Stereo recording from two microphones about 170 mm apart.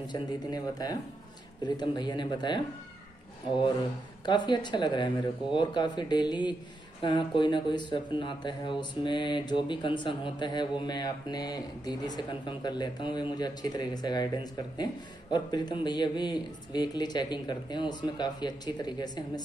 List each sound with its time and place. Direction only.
0.0 s speech: 25° left (ahead or behind)
4.3 s speech: 25° left (ahead or behind)